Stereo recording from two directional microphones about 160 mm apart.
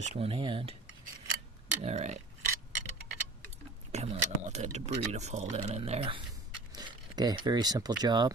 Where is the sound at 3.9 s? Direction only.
45° right (ahead or behind).